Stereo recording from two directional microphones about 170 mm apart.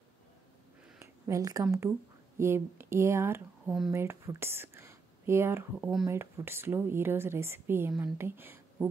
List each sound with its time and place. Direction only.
1.2 s speech: 20° right (ahead or behind)